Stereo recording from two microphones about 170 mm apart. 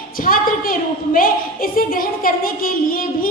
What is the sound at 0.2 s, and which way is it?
A woman's voice, 55° left (ahead or behind).